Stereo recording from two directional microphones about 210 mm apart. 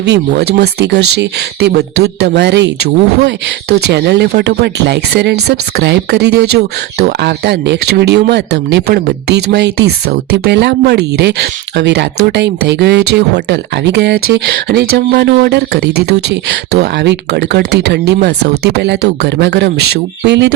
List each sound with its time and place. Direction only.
0.0 s speech: 55° right (ahead or behind)
3.8 s speech: 55° right (ahead or behind)